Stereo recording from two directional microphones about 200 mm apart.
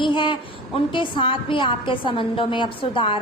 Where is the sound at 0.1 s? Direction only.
25° left (ahead or behind).